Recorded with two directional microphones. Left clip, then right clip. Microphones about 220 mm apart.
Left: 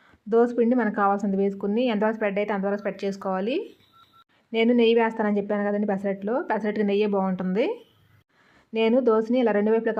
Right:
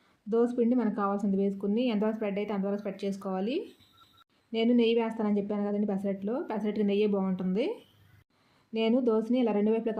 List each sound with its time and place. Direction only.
0.3 s speech: 15° left (ahead or behind)
4.5 s speech: 15° left (ahead or behind)
8.7 s speech: 10° left (ahead or behind)